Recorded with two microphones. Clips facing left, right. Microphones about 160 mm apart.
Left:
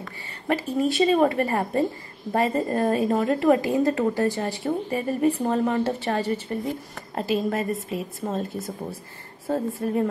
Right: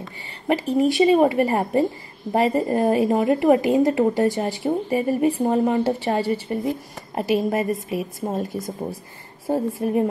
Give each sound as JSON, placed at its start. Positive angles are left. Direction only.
{"t": 0.0, "sound": "a woman's voice", "side_deg": -20}
{"t": 9.5, "sound": "a woman's voice", "side_deg": -15}